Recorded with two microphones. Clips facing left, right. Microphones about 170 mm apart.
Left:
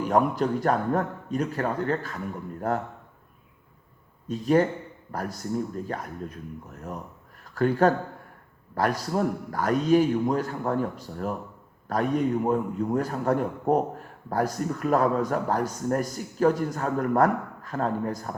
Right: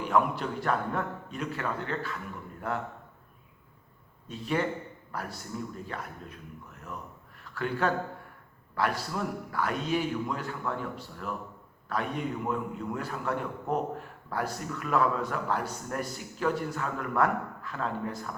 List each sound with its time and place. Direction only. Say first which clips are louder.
0.0 s a man's voice: left 4 dB; 40° left (ahead or behind)
4.3 s a man's voice: left 8 dB; 40° left (ahead or behind)